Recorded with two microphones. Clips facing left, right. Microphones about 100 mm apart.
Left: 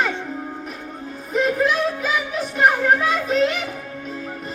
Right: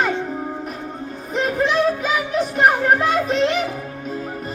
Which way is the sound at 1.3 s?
Centre (ahead or behind).